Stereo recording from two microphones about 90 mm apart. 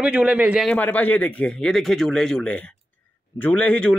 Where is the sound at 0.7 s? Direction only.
15° left (ahead or behind).